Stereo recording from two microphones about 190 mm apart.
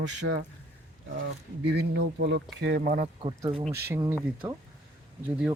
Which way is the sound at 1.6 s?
65° right (ahead or behind).